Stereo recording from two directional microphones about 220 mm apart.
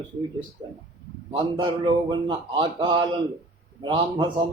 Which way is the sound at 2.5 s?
20° right (ahead or behind).